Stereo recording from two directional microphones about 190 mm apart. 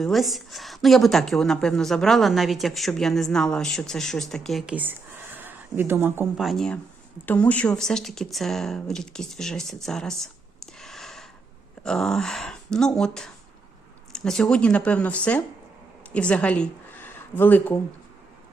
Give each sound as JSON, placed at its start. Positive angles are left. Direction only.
{"t": 0.0, "sound": "a woman's voice", "side_deg": 0}
{"t": 6.4, "sound": "a woman's voice", "side_deg": 0}
{"t": 10.8, "sound": "a sound", "side_deg": 0}
{"t": 11.8, "sound": "a woman's voice", "side_deg": 5}